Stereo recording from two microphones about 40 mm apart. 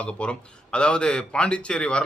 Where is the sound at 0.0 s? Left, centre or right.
Left.